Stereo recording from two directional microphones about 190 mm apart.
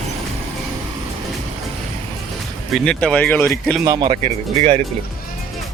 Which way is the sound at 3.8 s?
20° right (ahead or behind).